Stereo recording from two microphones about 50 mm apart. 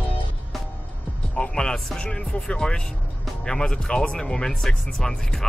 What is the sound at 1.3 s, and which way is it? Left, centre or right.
Music, centre.